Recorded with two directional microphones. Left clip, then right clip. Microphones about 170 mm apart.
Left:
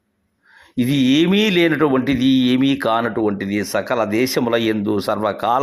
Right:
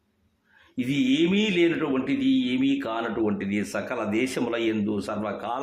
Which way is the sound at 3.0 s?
30° left (ahead or behind).